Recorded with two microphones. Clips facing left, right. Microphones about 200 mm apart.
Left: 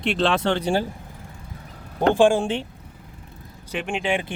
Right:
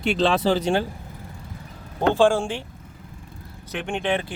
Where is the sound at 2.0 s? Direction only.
15° left (ahead or behind).